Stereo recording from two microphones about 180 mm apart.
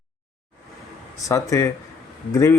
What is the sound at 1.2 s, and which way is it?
Speech, 15° left (ahead or behind).